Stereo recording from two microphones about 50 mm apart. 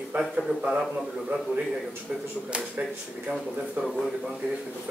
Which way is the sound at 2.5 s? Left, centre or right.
Centre.